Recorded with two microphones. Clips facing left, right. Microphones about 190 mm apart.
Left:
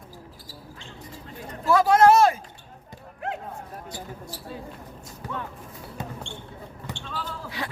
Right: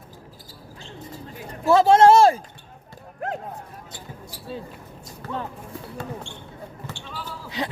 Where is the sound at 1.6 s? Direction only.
25° right (ahead or behind).